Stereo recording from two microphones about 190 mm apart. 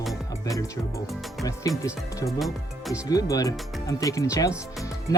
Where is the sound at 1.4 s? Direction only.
15° left (ahead or behind).